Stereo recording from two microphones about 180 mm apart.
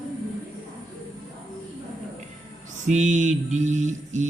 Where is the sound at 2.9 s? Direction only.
40° right (ahead or behind).